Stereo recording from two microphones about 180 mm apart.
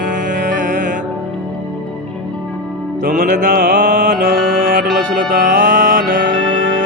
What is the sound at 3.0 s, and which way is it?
Music, 50° right (ahead or behind).